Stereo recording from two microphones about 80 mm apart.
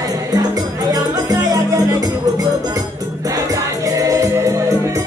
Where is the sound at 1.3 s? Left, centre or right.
Right.